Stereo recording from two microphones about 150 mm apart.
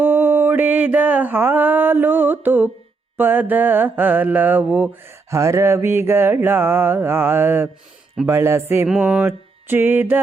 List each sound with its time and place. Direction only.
0.0 s mantra: 15° right (ahead or behind)